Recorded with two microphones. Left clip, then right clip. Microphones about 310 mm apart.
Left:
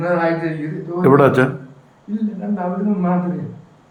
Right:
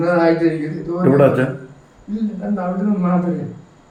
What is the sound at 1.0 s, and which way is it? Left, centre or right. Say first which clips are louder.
Speech: left 1 dB; left.